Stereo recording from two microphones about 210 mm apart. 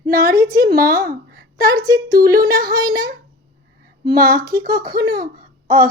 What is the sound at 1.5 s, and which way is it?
Speech, 15° right (ahead or behind).